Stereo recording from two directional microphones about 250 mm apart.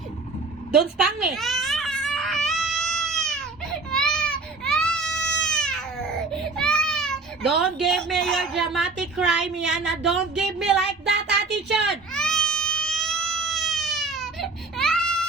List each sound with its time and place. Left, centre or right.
0.8 s baby cry: centre
6.6 s speech: centre
11.9 s baby cry: centre